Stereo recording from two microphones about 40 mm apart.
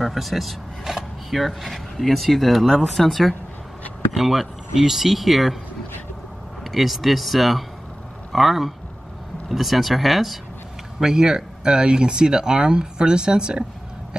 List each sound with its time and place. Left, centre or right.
0.0 s speech: centre
6.6 s speech: centre
11.0 s speech: centre